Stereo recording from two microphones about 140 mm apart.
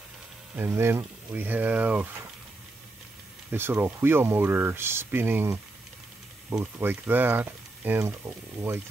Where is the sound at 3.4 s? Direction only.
15° right (ahead or behind).